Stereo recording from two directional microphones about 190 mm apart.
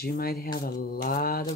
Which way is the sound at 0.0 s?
55° left (ahead or behind).